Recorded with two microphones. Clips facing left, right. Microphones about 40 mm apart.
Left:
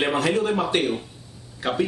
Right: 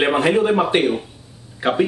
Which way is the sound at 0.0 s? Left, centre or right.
Right.